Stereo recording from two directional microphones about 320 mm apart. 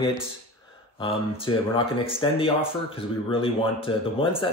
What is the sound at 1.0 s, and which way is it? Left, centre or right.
Speech, centre.